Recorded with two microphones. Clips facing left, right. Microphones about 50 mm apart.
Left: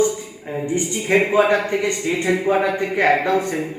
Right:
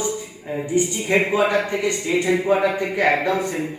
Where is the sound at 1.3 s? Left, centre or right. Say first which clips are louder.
Left 3 dB; left.